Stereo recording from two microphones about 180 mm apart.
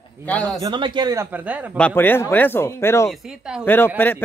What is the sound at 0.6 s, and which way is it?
Speech, 25° right (ahead or behind).